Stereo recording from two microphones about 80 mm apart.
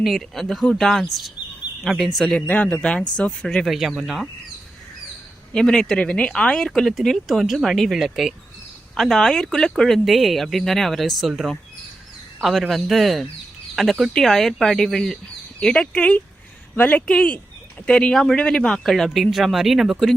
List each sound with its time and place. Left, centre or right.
0.0 s speech: centre
2.5 s speech: centre
3.7 s speech: centre
5.5 s speech: centre